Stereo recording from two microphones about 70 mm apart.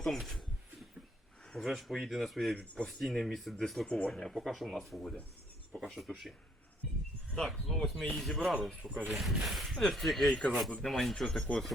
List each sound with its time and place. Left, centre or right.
0.0 s a sound: centre
1.6 s speech: centre
3.8 s speech: centre
4.1 s speech: centre
5.7 s mouse: centre
7.3 s speech: centre
8.8 s speech: right
9.0 s speech: centre